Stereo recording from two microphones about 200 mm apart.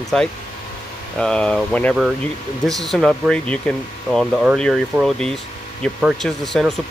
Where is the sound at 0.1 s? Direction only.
5° left (ahead or behind).